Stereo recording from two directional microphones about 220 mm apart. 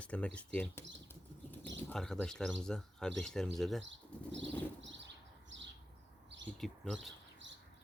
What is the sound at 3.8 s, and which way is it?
Speech, 55° right (ahead or behind).